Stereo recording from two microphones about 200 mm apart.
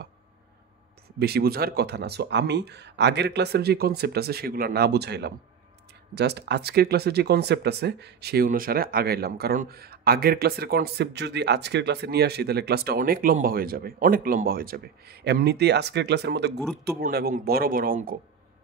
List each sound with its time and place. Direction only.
1.2 s speech: 50° right (ahead or behind)